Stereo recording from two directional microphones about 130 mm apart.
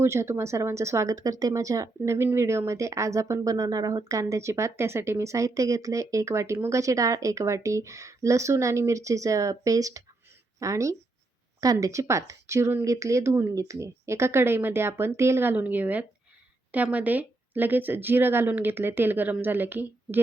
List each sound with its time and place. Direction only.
0.0 s a woman's voice: 20° right (ahead or behind)